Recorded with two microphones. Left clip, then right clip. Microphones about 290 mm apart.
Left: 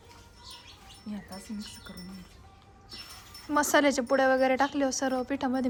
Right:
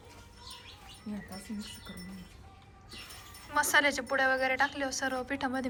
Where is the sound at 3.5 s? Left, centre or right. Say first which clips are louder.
Left 2 dB; left.